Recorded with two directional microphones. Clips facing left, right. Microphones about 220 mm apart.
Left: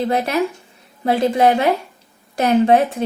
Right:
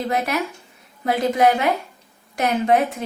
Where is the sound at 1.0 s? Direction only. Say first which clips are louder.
Left 3 dB; 30° left (ahead or behind).